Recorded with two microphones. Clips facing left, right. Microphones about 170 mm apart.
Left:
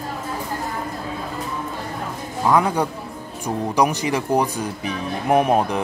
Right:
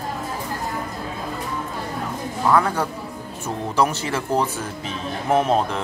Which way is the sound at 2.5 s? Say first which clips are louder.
Left 1 dB; 15° left (ahead or behind).